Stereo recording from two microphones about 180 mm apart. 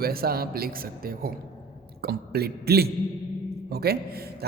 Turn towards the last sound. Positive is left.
turn(degrees=-60)  # may be behind; listen again after turning